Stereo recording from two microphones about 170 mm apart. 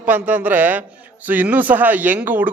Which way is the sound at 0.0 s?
10° right (ahead or behind).